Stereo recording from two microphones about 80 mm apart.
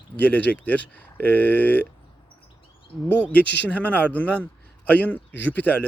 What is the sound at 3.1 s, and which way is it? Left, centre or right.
Speech, left.